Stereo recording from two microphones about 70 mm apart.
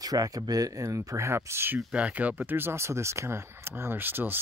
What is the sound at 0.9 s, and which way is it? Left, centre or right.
Speech, right.